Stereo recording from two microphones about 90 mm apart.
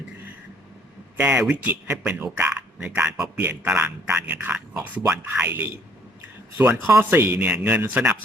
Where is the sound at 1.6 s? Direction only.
20° right (ahead or behind).